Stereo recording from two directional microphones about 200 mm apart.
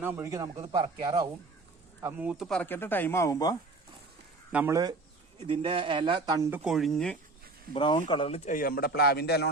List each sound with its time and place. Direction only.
0.0 s a man's voice: 10° right (ahead or behind); by 3.6 s 15° left (ahead or behind)
4.5 s a man's voice: 15° right (ahead or behind); by 7.2 s 5° left (ahead or behind)
7.7 s speech: 25° left (ahead or behind)
8.4 s a man's voice: 45° left (ahead or behind)